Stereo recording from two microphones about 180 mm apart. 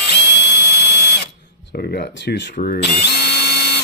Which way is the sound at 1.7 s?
60° left (ahead or behind).